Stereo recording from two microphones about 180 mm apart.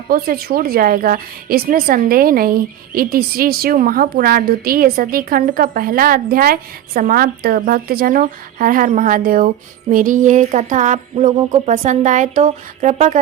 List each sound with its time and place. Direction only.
0.1 s speech: 55° right (ahead or behind)